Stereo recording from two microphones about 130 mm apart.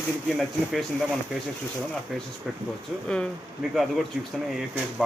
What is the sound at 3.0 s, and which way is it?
Speech, 5° left (ahead or behind).